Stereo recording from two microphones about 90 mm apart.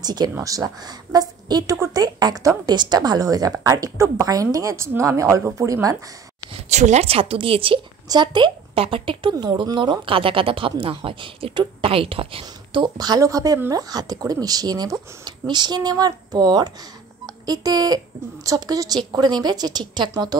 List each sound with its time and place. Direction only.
0.0 s speech: 50° right (ahead or behind)
0.4 s a woman's voice: 40° right (ahead or behind)
7.1 s a woman's voice: 90° right
8.1 s a woman's voice: 55° right (ahead or behind); by 9.3 s 75° right (ahead or behind)
9.3 s a woman's voice: 50° right (ahead or behind); by 12.9 s 80° right
12.9 s speech: 45° right (ahead or behind)